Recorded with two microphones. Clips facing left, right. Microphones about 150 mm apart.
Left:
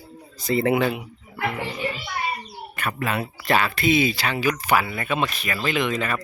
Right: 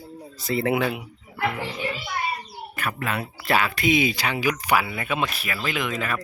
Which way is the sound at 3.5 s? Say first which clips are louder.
Left 1 dB; 10° right (ahead or behind).